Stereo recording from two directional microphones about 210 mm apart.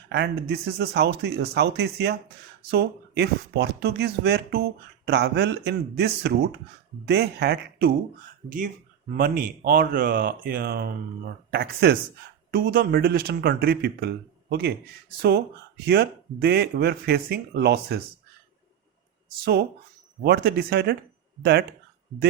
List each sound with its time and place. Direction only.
0.1 s speech: 50° right (ahead or behind)
15.9 s speech: 50° right (ahead or behind)
20.2 s speech: 45° right (ahead or behind)